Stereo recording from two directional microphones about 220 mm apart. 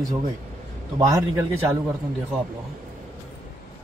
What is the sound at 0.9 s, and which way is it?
Speech, 15° right (ahead or behind).